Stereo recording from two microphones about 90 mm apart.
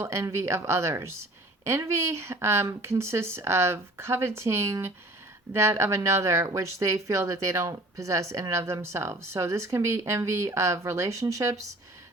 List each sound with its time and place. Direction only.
0.0 s speech: 30° right (ahead or behind)